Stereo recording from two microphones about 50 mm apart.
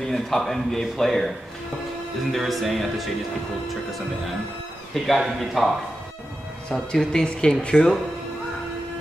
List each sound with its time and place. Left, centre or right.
0.0 s speech: centre
2.3 s speech: centre
6.9 s speech: centre